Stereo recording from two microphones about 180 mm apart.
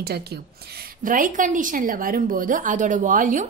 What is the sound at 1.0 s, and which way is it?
A woman's voice, 45° right (ahead or behind).